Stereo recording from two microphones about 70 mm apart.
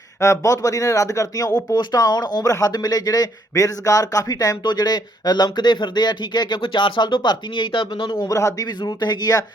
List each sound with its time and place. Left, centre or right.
0.2 s speech: left
1.7 s speech: left
2.5 s speech: left
8.3 s speech: left
8.8 s speech: left